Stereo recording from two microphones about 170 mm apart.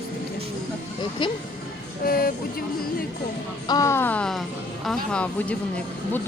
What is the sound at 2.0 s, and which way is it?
Speech, 60° left (ahead or behind).